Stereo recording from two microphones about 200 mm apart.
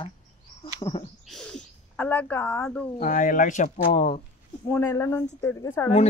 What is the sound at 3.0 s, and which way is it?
Speech, 40° left (ahead or behind).